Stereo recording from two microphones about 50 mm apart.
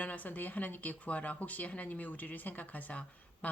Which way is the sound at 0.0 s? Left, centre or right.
Left.